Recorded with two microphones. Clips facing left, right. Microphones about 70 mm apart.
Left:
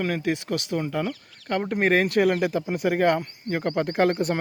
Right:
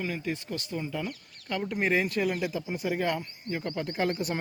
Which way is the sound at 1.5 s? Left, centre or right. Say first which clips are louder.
Left 6 dB; left.